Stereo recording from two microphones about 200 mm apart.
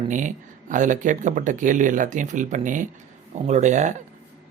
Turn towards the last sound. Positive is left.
turn(degrees=-35)  # may be behind; listen again after turning